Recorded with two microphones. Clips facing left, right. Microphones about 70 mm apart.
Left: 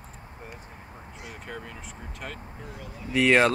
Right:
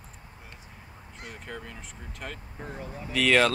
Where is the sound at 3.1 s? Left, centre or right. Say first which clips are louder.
Left 2 dB; left.